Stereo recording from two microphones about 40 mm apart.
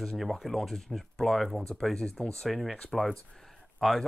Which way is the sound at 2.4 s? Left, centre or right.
Centre.